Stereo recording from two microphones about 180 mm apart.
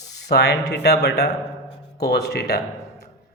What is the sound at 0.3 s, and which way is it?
A man's voice, 65° left (ahead or behind).